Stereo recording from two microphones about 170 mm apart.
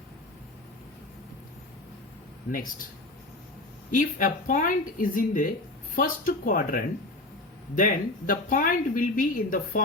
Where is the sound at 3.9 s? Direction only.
50° left (ahead or behind).